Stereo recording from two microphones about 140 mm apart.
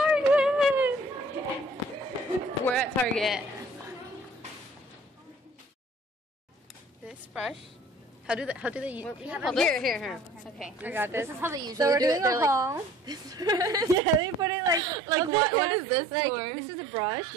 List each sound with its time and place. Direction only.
0.0 s a sound: 5° right (ahead or behind)
2.6 s speech: 5° left (ahead or behind)
7.1 s a sound: 5° right (ahead or behind)
8.3 s speech: 5° right (ahead or behind)
9.5 s a woman's voice: 5° left (ahead or behind)
10.6 s a woman's voice: 10° right (ahead or behind); by 17.2 s 30° right (ahead or behind)